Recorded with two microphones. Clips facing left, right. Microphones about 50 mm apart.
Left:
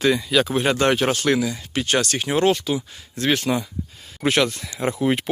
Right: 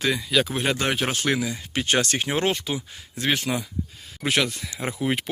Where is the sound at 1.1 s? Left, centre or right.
Centre.